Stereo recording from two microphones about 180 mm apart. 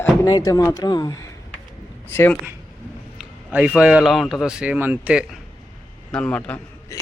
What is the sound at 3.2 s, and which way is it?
Speech, 5° right (ahead or behind).